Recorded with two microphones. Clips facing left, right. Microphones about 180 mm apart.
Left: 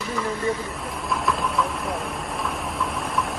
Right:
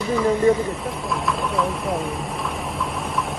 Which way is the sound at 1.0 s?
Centre (ahead or behind).